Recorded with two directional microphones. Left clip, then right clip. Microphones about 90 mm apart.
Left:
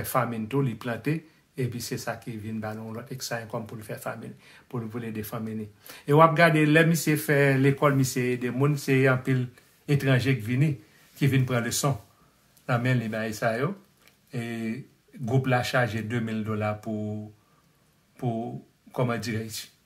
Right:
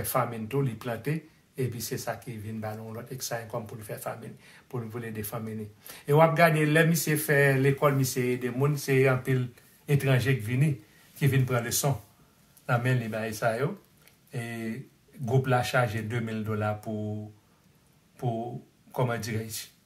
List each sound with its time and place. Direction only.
0.0 s speech: 40° left (ahead or behind)
18.1 s a sound: 25° left (ahead or behind)
18.9 s speech: 30° left (ahead or behind)